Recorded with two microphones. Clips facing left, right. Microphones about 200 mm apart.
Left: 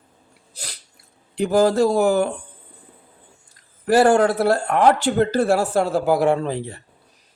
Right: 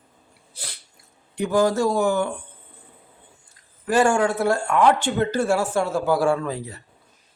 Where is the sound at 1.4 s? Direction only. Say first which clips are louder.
Left 3 dB; 35° left (ahead or behind).